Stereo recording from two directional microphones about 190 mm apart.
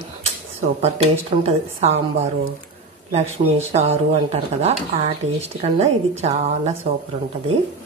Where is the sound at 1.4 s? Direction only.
35° right (ahead or behind).